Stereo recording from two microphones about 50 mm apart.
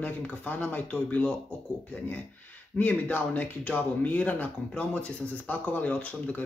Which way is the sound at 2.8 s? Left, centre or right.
Left.